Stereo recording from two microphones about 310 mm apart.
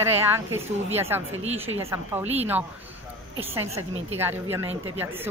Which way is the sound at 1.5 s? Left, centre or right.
Right.